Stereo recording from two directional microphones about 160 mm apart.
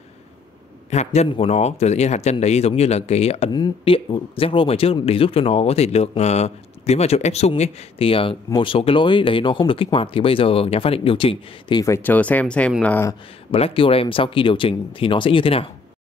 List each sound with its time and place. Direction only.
0.8 s speech: 45° left (ahead or behind)
11.8 s speech: 15° left (ahead or behind)
13.5 s speech: 35° left (ahead or behind)